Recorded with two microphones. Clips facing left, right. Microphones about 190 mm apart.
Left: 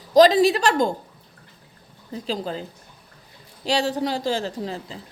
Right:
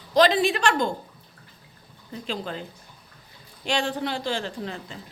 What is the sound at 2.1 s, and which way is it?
A woman's voice, 35° left (ahead or behind).